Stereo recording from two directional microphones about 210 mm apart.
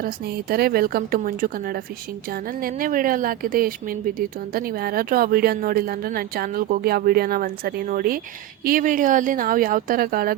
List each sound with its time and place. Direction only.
0.0 s speech: 45° right (ahead or behind)